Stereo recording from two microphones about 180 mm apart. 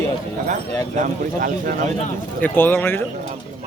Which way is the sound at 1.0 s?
50° right (ahead or behind).